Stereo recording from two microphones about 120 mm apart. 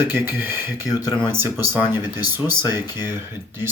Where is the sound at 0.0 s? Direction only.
15° right (ahead or behind).